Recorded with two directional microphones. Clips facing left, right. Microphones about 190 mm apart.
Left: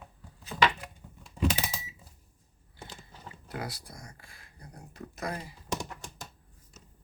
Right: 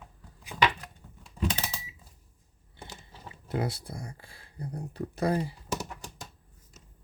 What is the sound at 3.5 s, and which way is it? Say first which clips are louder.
Speech: right 7 dB; 25° right (ahead or behind).